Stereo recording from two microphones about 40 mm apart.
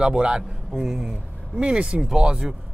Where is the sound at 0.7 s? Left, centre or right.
Centre.